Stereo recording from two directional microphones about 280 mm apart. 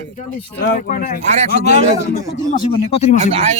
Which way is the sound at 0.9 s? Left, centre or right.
Left.